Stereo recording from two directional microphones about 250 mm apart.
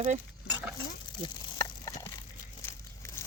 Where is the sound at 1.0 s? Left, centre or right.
Centre.